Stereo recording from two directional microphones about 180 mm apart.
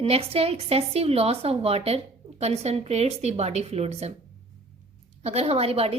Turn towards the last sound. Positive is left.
turn(degrees=-35)  # may be behind; listen again after turning